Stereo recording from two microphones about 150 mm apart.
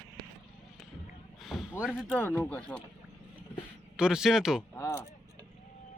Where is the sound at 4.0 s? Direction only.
5° right (ahead or behind).